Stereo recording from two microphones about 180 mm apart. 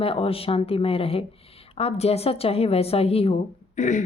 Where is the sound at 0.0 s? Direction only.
30° left (ahead or behind).